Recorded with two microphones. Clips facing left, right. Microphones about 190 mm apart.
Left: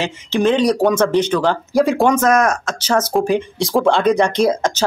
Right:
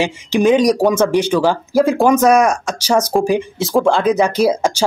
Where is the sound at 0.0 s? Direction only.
10° right (ahead or behind).